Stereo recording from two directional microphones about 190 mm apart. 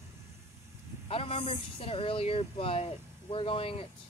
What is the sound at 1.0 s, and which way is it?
Speech, 30° left (ahead or behind).